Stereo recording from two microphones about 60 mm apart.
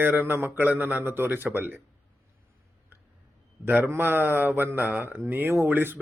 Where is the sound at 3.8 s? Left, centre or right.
Right.